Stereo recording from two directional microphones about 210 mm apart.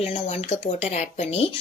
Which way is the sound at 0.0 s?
30° left (ahead or behind).